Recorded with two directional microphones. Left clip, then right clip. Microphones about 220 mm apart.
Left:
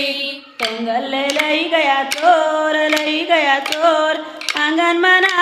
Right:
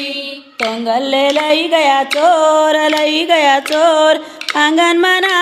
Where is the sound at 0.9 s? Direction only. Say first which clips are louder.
Right 7 dB; 40° right (ahead or behind).